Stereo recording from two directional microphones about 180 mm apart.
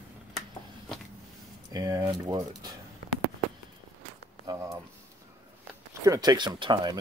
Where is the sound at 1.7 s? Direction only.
20° right (ahead or behind).